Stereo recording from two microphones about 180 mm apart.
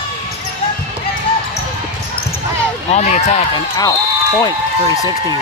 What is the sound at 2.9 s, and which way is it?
Speech, 40° left (ahead or behind).